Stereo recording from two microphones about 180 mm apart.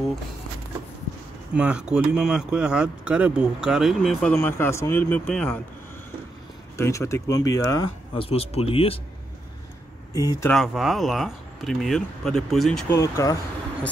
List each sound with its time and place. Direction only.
1.5 s speech: 5° right (ahead or behind)
6.8 s speech: 15° left (ahead or behind)
8.1 s speech: 30° left (ahead or behind)
10.1 s speech: 20° left (ahead or behind)
10.5 s speech: centre (ahead or behind)
12.9 s speech: 15° left (ahead or behind)